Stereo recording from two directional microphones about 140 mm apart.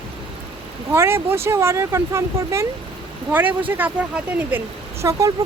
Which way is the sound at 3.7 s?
10° right (ahead or behind).